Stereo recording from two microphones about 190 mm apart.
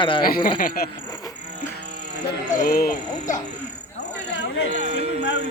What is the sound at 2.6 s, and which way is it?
Speech, 55° left (ahead or behind).